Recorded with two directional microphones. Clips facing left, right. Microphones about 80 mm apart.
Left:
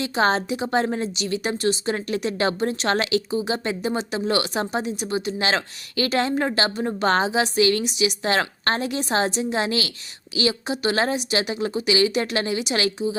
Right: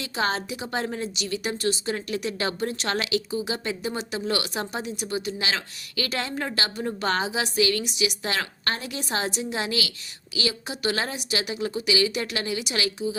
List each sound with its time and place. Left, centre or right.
0.0 s a woman's voice: left